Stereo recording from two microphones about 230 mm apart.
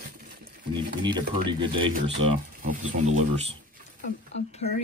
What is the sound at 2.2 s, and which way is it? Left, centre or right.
Speech, right.